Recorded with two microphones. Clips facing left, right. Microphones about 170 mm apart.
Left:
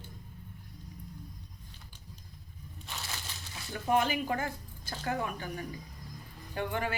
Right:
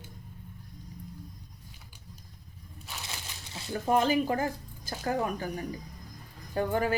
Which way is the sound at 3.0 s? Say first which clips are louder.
Even; 25° right (ahead or behind).